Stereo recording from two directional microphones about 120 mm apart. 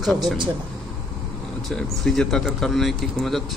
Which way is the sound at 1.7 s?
5° left (ahead or behind).